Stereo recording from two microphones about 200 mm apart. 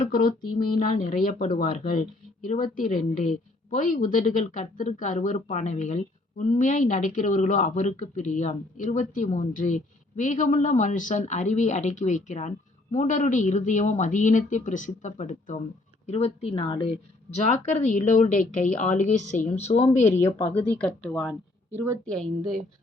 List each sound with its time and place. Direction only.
0.0 s a sound: 45° left (ahead or behind)
1.2 s speech: 40° left (ahead or behind)
20.4 s a woman's voice: 10° left (ahead or behind)